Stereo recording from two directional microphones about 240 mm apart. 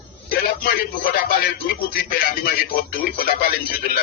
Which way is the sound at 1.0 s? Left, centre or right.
Left.